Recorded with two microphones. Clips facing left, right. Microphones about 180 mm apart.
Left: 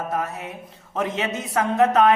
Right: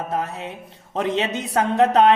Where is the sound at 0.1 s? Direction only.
25° right (ahead or behind).